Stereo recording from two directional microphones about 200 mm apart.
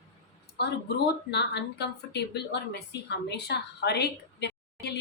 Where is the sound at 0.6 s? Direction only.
55° left (ahead or behind).